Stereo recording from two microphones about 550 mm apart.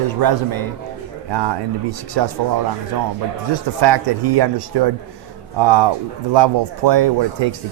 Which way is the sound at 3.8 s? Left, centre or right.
Right.